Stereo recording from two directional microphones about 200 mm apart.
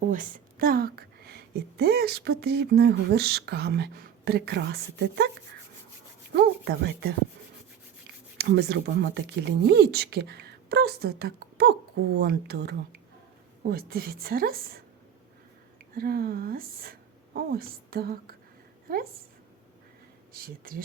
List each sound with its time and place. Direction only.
0.1 s a woman's voice: 40° right (ahead or behind); by 5.3 s 55° right (ahead or behind)
6.3 s speech: 55° right (ahead or behind)
8.4 s a woman's voice: 55° right (ahead or behind)
16.0 s a woman's voice: 50° right (ahead or behind)
20.3 s a woman's voice: 45° right (ahead or behind)